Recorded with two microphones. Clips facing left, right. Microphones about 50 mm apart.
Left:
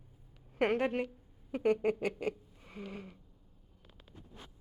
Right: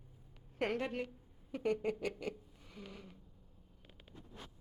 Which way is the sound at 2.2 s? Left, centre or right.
Left.